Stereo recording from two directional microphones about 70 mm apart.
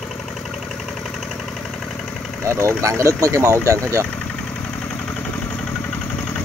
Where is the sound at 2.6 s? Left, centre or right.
Right.